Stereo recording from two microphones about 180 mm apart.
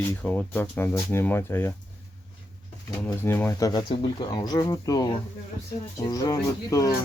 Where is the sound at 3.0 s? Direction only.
10° left (ahead or behind).